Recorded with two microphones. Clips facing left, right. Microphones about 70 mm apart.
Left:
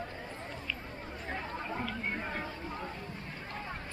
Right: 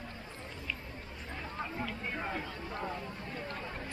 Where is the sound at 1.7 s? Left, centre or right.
Left.